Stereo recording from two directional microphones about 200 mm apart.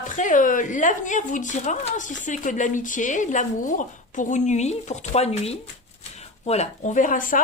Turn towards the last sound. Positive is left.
turn(degrees=40)  # may be behind; listen again after turning